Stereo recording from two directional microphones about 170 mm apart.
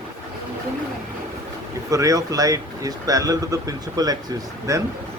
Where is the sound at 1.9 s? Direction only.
20° right (ahead or behind).